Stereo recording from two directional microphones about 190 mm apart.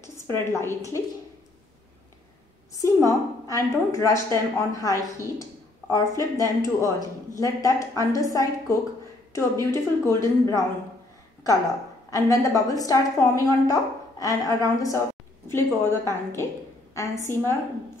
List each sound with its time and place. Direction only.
0.0 s a woman's voice: 15° left (ahead or behind)
2.7 s a woman's voice: 15° left (ahead or behind)
12.1 s a woman's voice: 15° left (ahead or behind)